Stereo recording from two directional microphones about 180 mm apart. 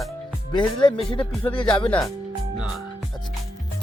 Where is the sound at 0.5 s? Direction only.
25° left (ahead or behind).